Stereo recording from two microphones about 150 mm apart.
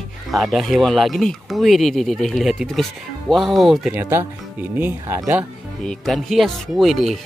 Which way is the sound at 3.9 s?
15° right (ahead or behind).